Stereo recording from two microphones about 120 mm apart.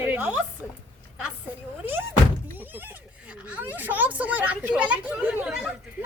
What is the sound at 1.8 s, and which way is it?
Speech, 15° right (ahead or behind).